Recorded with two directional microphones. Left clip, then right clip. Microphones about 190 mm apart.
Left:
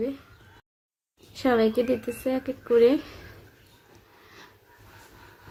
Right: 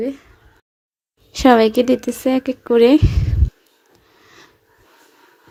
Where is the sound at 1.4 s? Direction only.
50° right (ahead or behind).